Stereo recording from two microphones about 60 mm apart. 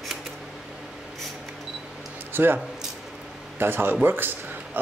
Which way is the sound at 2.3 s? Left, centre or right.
Right.